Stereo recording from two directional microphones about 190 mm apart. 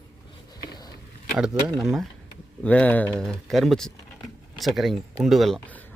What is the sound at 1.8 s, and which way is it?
Speech, centre (ahead or behind).